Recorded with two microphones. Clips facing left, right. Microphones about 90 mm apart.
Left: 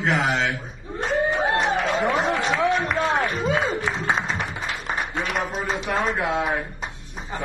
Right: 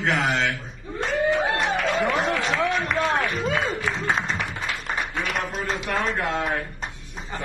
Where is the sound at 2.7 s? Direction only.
5° left (ahead or behind).